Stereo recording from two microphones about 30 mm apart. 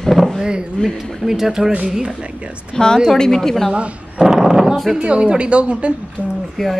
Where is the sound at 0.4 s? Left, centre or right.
Right.